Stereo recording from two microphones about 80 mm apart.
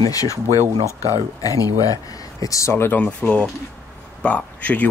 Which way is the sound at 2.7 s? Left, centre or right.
Left.